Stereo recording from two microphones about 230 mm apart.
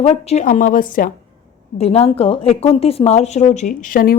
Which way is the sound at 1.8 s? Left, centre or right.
Left.